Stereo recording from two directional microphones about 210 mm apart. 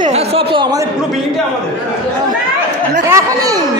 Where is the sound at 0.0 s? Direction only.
30° right (ahead or behind).